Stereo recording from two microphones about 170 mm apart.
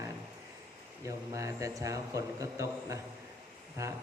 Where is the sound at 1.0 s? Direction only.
20° right (ahead or behind).